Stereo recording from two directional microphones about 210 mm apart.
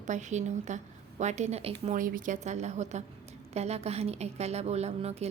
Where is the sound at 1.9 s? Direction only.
40° right (ahead or behind).